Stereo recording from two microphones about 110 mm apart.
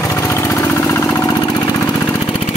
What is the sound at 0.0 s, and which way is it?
Lawn mower, 25° left (ahead or behind).